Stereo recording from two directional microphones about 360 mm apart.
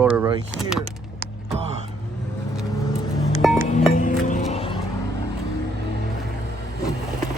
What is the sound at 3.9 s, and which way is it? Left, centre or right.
Music, left.